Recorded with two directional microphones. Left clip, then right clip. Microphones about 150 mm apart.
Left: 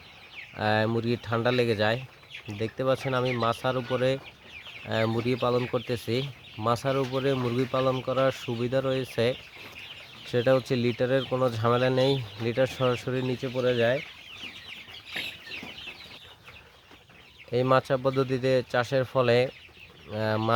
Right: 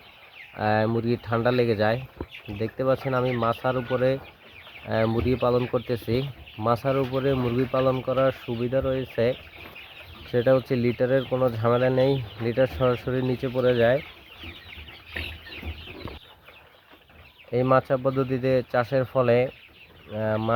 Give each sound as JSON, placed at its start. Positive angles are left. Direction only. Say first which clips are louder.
{"t": 0.5, "sound": "speech", "louder": "right 2 dB", "side_deg": 10}
{"t": 17.5, "sound": "speech", "louder": "right 2 dB", "side_deg": 10}
{"t": 20.1, "sound": "speech", "louder": "right 2 dB", "side_deg": 30}